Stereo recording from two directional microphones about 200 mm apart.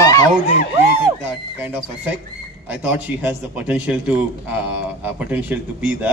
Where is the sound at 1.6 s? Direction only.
5° right (ahead or behind).